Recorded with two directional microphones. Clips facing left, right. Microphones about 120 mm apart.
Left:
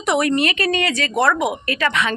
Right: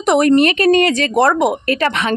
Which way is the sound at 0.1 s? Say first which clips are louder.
Right 7 dB; 45° right (ahead or behind).